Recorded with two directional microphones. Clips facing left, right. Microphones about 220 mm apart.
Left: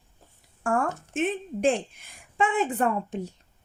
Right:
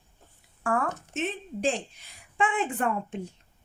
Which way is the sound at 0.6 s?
45° left (ahead or behind).